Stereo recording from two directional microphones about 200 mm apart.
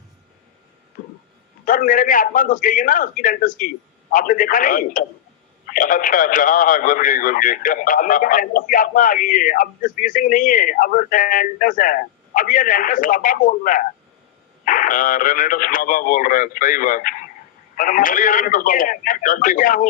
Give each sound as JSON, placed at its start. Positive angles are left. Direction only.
{"t": 1.6, "sound": "speech", "side_deg": 40}